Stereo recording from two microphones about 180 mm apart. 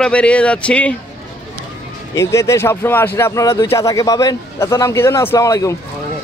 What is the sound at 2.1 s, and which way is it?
Speech, 15° left (ahead or behind).